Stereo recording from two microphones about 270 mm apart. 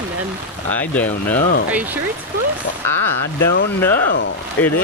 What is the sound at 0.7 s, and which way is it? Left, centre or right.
Speech, centre.